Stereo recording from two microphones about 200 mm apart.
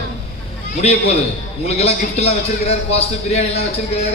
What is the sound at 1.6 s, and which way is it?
A man's voice, 30° left (ahead or behind).